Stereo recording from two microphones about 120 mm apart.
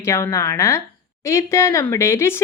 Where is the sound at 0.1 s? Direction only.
25° left (ahead or behind).